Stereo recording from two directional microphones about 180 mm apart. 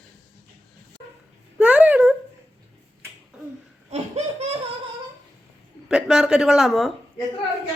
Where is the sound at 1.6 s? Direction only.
5° right (ahead or behind).